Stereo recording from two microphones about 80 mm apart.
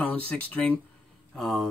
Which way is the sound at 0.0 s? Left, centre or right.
Centre.